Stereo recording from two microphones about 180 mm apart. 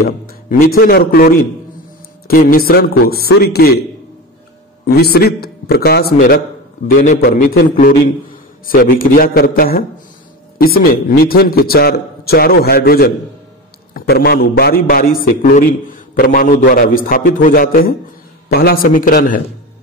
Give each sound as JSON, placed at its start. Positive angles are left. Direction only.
{"t": 0.0, "sound": "a man's voice", "side_deg": 55}
{"t": 4.8, "sound": "a man's voice", "side_deg": 60}